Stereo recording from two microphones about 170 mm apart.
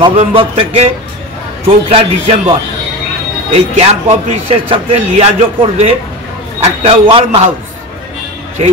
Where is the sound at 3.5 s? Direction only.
40° right (ahead or behind).